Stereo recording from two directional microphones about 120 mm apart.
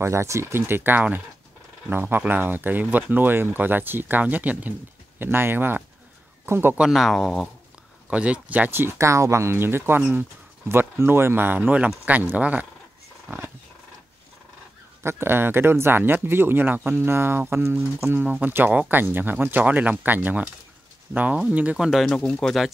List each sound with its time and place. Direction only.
0.0 s speech: 25° right (ahead or behind)
6.8 s speech: centre (ahead or behind)
15.0 s speech: 20° right (ahead or behind); by 22.7 s 5° left (ahead or behind)